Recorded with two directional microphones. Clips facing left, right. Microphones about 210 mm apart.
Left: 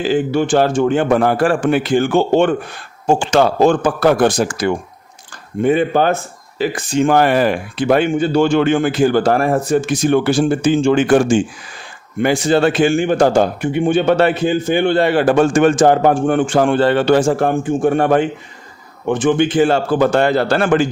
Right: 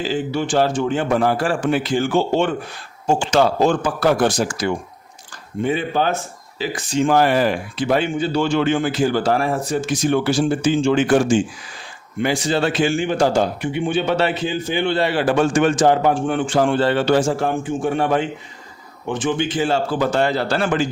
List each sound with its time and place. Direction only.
0.0 s a man's voice: 55° left (ahead or behind)